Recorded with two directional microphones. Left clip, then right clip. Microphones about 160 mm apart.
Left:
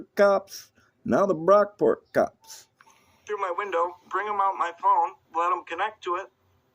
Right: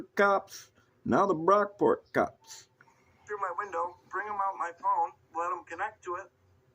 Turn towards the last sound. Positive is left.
turn(degrees=90)